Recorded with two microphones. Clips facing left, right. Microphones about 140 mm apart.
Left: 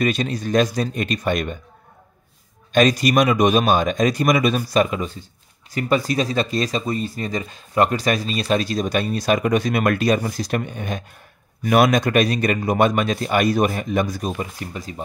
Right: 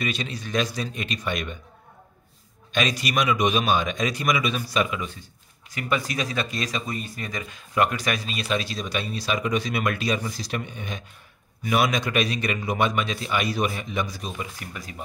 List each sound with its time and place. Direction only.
0.0 s a man's voice: 45° left (ahead or behind)
2.7 s a man's voice: 45° left (ahead or behind)
14.6 s speech: 30° left (ahead or behind)